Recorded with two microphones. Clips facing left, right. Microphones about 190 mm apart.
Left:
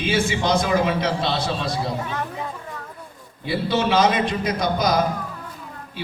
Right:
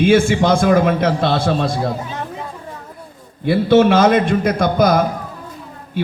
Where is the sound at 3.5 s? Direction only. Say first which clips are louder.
Right 9 dB; 50° right (ahead or behind).